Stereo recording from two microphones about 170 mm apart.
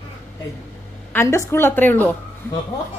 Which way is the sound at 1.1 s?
15° left (ahead or behind).